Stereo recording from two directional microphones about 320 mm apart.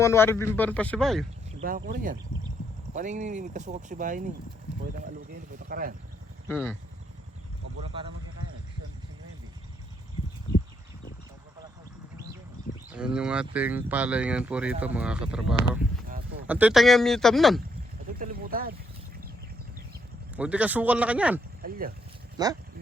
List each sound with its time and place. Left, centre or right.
0.0 s speech: centre
1.5 s speech: right
5.6 s speech: right
6.5 s speech: centre
12.9 s speech: centre
18.2 s speech: right
20.3 s speech: centre
21.6 s speech: right
22.4 s speech: centre